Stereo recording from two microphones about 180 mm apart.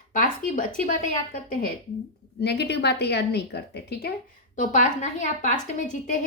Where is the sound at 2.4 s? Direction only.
65° left (ahead or behind).